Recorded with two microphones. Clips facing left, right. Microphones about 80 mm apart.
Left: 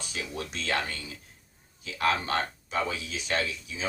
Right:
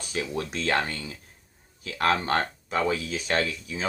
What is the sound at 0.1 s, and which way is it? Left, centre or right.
Speech, right.